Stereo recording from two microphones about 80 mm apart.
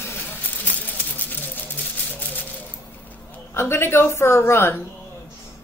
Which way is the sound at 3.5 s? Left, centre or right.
Left.